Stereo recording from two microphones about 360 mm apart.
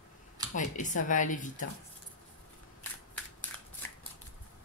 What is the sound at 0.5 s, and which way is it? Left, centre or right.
Speech, left.